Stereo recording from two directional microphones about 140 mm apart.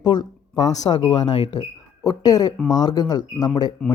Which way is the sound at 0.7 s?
55° left (ahead or behind).